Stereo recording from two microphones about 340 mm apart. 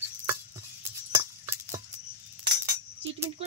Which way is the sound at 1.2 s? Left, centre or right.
Centre.